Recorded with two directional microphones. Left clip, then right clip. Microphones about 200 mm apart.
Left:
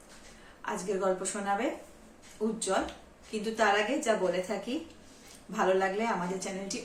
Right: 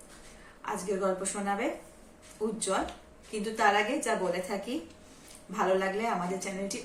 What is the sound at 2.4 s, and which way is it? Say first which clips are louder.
A woman's voice: even; 15° left (ahead or behind).